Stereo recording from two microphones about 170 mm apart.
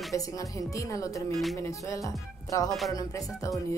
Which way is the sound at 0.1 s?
20° left (ahead or behind).